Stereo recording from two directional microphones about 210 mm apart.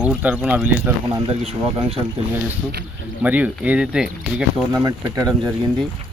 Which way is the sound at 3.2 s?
5° right (ahead or behind).